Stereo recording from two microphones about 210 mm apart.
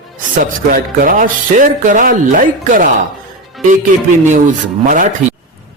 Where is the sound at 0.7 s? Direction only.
40° right (ahead or behind).